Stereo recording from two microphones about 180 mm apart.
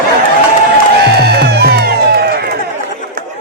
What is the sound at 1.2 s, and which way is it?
Music, 65° right (ahead or behind).